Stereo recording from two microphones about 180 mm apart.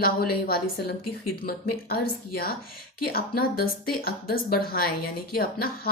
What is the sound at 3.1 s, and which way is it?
A woman's voice, 55° left (ahead or behind).